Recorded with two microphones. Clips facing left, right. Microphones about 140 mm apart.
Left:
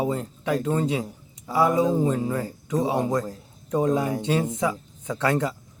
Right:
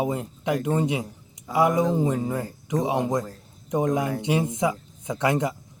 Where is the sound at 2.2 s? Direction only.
15° right (ahead or behind).